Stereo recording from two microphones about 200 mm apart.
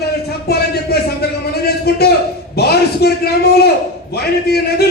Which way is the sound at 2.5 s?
50° left (ahead or behind).